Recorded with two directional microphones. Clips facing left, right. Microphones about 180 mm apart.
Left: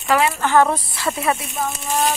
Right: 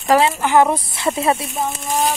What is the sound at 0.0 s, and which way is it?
Speech, 35° right (ahead or behind).